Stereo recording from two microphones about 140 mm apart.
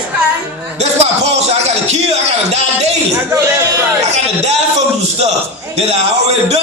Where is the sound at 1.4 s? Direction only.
50° right (ahead or behind).